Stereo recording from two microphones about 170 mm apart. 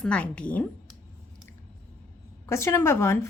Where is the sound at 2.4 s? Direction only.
15° left (ahead or behind).